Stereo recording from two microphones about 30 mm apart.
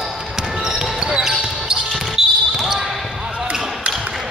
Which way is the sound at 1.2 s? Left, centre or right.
Centre.